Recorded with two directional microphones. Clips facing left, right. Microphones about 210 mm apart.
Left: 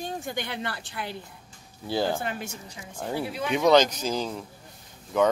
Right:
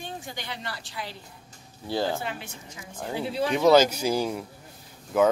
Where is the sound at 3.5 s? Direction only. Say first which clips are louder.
Right 1 dB; 5° right (ahead or behind).